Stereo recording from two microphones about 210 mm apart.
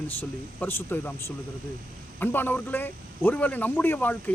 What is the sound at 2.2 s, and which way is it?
A man's voice, 10° left (ahead or behind).